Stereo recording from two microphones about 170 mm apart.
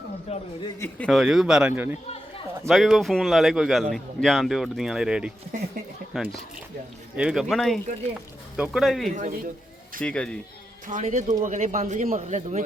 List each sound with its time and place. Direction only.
0.3 s a man's voice: 35° left (ahead or behind)
0.8 s a man's voice: 5° left (ahead or behind); by 2.0 s 10° right (ahead or behind)
2.6 s a man's voice: centre (ahead or behind)
9.1 s a man's voice: 50° right (ahead or behind)
10.0 s speech: 5° left (ahead or behind)
10.8 s a man's voice: 50° right (ahead or behind)